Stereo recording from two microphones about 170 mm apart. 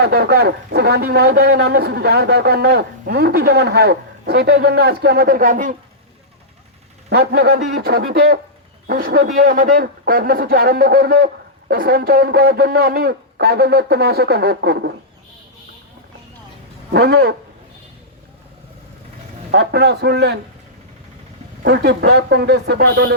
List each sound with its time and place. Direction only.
0.0 s speech: 70° right (ahead or behind); by 5.7 s 50° right (ahead or behind)
7.1 s a man's voice: 70° right (ahead or behind)
16.9 s speech: 70° right (ahead or behind)
19.5 s speech: 75° right (ahead or behind)
21.6 s speech: 80° right